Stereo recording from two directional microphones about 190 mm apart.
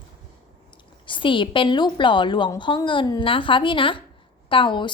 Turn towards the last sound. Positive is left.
turn(degrees=25)  # may be behind; listen again after turning